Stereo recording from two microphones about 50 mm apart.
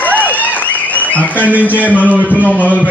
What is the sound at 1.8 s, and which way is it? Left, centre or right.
Speech, left.